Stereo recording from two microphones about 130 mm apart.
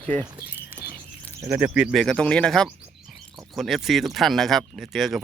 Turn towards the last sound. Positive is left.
turn(degrees=0)  # may be behind; listen again after turning